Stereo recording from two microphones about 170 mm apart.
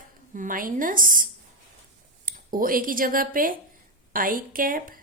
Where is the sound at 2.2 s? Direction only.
55° right (ahead or behind).